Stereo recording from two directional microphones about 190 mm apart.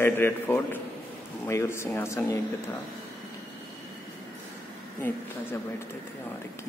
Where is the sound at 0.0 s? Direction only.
10° left (ahead or behind).